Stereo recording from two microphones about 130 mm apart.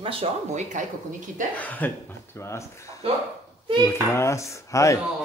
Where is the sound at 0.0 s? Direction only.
45° right (ahead or behind).